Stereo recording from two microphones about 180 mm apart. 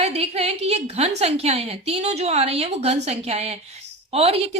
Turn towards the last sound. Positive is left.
turn(degrees=-35)  # may be behind; listen again after turning